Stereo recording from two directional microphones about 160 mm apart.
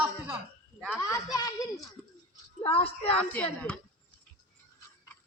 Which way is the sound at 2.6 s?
35° left (ahead or behind).